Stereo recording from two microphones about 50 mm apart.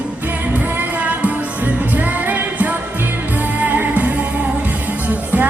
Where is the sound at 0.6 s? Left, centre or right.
Right.